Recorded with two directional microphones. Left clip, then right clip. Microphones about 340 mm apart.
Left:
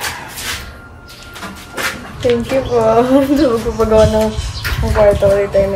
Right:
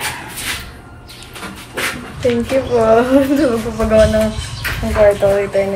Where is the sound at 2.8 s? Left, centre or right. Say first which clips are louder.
Even; centre.